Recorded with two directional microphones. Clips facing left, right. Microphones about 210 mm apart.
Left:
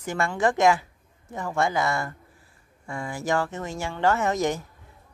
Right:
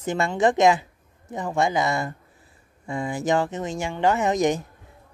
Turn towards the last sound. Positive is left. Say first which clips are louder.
# right 3 dB
turn(degrees=-15)  # may be behind; listen again after turning